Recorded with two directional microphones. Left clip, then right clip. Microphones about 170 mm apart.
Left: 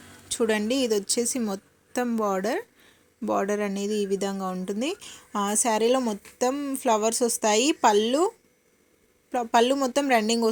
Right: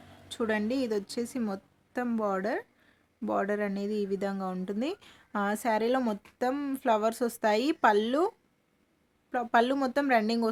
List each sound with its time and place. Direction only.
0.3 s speech: 15° left (ahead or behind)
9.3 s speech: 10° left (ahead or behind)